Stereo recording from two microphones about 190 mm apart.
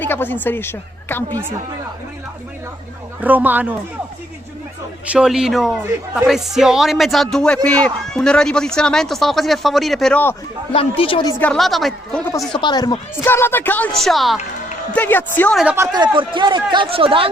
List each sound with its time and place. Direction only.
0.0 s speech: 10° left (ahead or behind)
3.2 s speech: 10° right (ahead or behind)
5.1 s a man's voice: 5° right (ahead or behind)
10.7 s speech: 30° left (ahead or behind)
11.3 s a man's voice: 5° left (ahead or behind)
12.5 s speech: 20° left (ahead or behind); by 15.6 s 5° left (ahead or behind)
15.6 s speech: 15° right (ahead or behind); by 17.2 s 30° right (ahead or behind)